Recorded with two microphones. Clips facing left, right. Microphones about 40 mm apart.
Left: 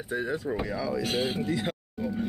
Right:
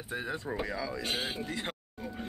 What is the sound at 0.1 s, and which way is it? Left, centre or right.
Speech, centre.